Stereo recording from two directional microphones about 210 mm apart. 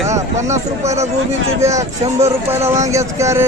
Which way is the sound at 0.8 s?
30° right (ahead or behind).